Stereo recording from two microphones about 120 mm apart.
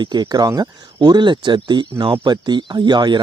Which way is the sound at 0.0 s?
35° right (ahead or behind).